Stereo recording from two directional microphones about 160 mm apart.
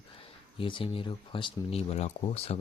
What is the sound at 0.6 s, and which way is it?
Speech, 35° left (ahead or behind).